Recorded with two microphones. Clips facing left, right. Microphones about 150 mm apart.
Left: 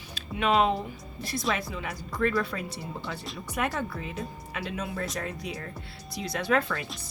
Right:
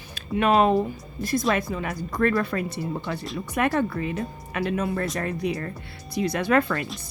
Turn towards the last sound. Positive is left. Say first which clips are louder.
# right 5 dB
turn(degrees=-60)  # may be behind; listen again after turning